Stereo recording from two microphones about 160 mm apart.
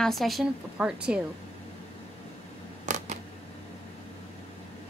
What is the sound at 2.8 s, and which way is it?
Camera, 50° right (ahead or behind).